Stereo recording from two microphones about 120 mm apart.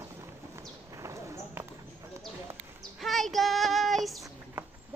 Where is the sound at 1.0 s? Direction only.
25° right (ahead or behind).